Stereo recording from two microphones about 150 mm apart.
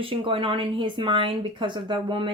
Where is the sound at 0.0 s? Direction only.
35° right (ahead or behind).